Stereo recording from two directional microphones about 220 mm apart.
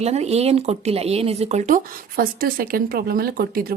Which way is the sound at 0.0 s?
30° right (ahead or behind).